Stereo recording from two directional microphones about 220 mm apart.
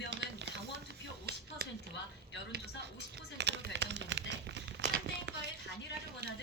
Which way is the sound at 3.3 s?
50° right (ahead or behind).